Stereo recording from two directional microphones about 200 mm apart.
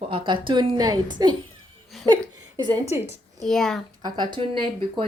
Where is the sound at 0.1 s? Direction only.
25° right (ahead or behind).